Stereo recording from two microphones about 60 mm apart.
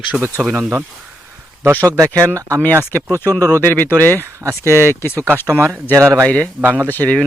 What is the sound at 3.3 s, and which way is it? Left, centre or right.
Speech, right.